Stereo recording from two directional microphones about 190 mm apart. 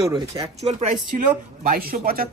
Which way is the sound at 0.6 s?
40° right (ahead or behind).